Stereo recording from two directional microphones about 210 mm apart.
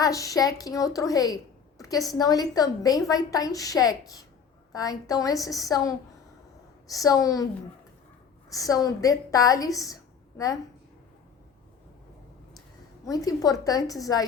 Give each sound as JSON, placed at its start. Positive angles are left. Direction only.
{"t": 0.0, "sound": "a woman's voice", "side_deg": 15}
{"t": 8.4, "sound": "a woman's voice", "side_deg": 15}
{"t": 13.1, "sound": "a woman's voice", "side_deg": 15}